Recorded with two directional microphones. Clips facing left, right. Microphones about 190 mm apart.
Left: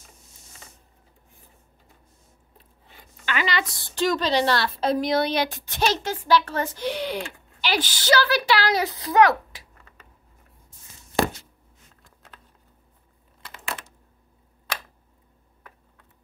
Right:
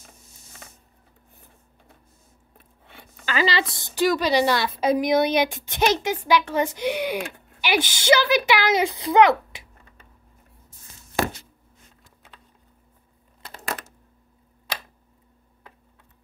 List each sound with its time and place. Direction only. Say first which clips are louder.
3.3 s speech: right 3 dB; 35° right (ahead or behind)
3.8 s a woman's voice: right 2 dB; 10° right (ahead or behind)
13.4 s a sound: right 3 dB; 35° right (ahead or behind)